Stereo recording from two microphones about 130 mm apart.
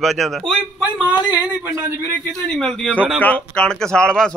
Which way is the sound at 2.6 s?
10° left (ahead or behind).